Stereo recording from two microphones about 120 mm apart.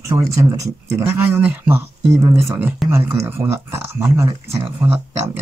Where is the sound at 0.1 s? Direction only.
25° right (ahead or behind).